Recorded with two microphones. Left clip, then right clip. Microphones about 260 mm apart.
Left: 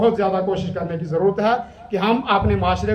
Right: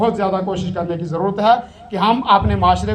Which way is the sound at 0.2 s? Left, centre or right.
Centre.